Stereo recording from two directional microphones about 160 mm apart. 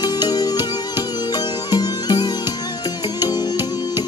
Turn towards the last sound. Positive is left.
turn(degrees=25)  # may be behind; listen again after turning